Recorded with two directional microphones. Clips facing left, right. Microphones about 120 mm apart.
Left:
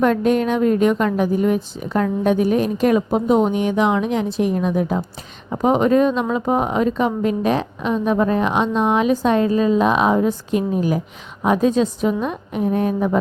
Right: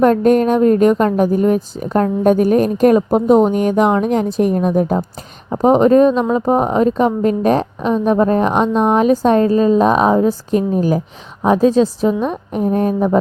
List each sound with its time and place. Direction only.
0.0 s a woman's voice: 45° right (ahead or behind)